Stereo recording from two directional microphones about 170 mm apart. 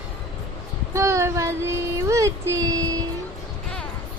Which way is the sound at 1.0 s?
15° right (ahead or behind).